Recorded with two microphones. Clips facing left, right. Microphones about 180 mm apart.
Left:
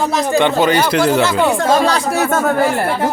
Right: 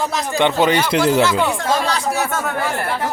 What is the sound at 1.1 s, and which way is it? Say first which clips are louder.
Speech: left 2 dB; 30° left (ahead or behind).